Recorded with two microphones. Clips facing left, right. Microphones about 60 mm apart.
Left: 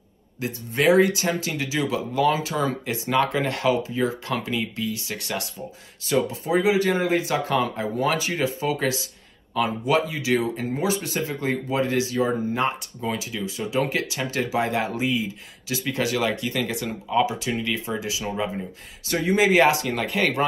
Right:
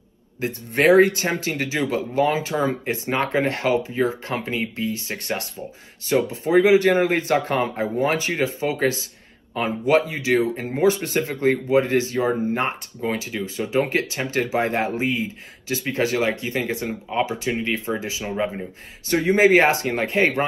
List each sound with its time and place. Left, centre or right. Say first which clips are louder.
0.4 s speech: right 4 dB; right